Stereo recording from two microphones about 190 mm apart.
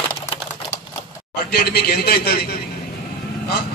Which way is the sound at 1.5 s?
55° left (ahead or behind).